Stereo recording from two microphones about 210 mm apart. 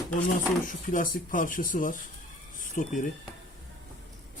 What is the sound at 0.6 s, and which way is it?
Speech, 40° left (ahead or behind).